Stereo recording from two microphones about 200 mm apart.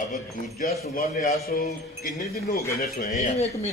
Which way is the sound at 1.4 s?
50° left (ahead or behind).